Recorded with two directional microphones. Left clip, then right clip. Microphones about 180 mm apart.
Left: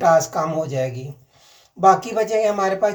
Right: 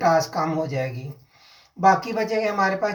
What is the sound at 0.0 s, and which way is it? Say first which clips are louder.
Speech: left 4 dB; 35° left (ahead or behind).